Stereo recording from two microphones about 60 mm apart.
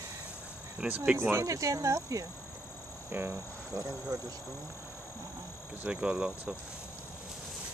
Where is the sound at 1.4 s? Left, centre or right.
Right.